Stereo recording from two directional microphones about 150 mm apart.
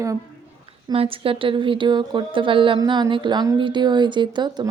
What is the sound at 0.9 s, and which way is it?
A woman's voice, 35° right (ahead or behind).